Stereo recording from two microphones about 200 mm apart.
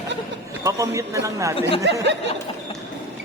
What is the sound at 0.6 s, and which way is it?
Speech, 15° right (ahead or behind).